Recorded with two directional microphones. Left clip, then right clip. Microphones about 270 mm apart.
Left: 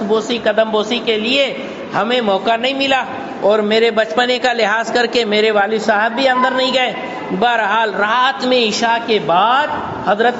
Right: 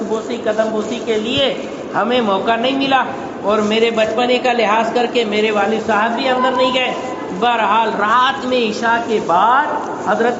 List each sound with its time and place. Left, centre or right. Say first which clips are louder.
1.0 s a man's voice: left 1 dB; left